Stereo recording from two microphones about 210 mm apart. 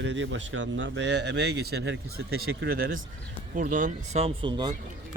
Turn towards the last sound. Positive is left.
turn(degrees=-20)  # may be behind; listen again after turning